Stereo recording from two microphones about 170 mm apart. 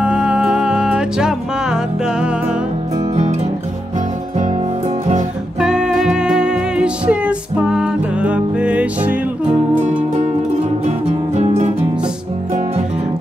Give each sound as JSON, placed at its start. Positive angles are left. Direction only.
{"t": 0.0, "sound": "music", "side_deg": -5}
{"t": 5.6, "sound": "music", "side_deg": -5}
{"t": 10.9, "sound": "music", "side_deg": -40}